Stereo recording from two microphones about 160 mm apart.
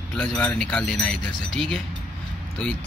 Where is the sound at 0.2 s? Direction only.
5° left (ahead or behind).